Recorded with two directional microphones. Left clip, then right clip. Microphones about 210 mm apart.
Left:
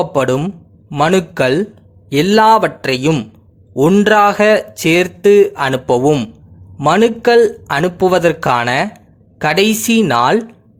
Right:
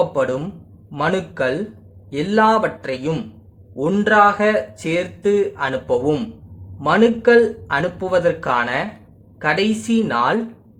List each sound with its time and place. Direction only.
0.1 s a man's voice: 45° left (ahead or behind)